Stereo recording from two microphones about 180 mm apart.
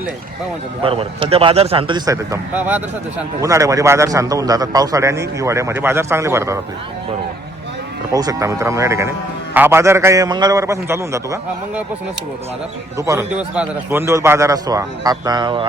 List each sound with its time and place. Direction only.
0.8 s speech: 30° right (ahead or behind)
2.0 s a man's voice: 15° right (ahead or behind)
8.1 s a man's voice: 20° right (ahead or behind)
13.0 s a man's voice: 15° right (ahead or behind)